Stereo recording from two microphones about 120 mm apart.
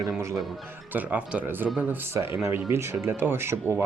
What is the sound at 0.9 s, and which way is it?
Speech, 15° right (ahead or behind).